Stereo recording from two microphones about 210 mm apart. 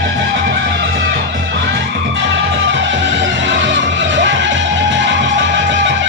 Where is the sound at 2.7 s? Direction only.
60° right (ahead or behind).